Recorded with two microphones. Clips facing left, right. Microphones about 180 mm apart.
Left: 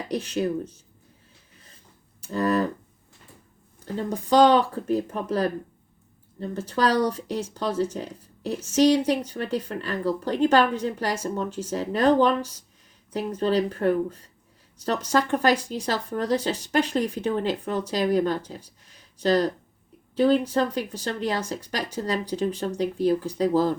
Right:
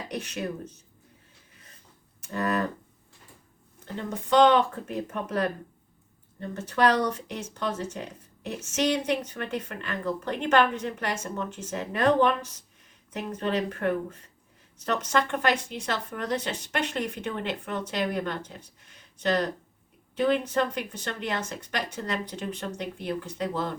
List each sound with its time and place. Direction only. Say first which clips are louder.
0.1 s speech: left 8 dB; 30° left (ahead or behind)
2.2 s speech: left 5 dB; 30° left (ahead or behind)
3.9 s speech: left 3 dB; 35° left (ahead or behind)
6.6 s speech: left 1 dB; 30° left (ahead or behind)